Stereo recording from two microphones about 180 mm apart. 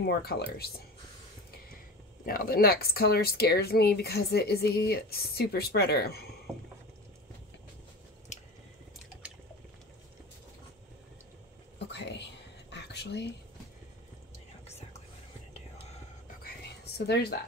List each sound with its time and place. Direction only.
0.0 s speech: 60° left (ahead or behind)
2.2 s speech: 55° left (ahead or behind)
11.9 s whispering: 75° left (ahead or behind)
16.4 s a sound: 65° left (ahead or behind)